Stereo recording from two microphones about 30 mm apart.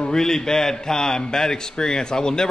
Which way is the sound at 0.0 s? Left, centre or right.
Left.